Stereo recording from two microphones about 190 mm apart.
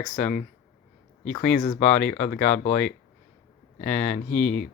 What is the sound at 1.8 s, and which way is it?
Speech, 5° left (ahead or behind).